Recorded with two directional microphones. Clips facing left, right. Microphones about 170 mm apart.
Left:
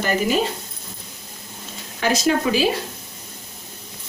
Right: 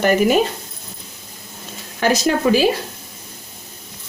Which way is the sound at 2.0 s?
50° right (ahead or behind).